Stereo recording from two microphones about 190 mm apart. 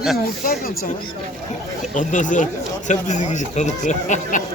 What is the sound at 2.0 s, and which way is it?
Speech, 40° left (ahead or behind).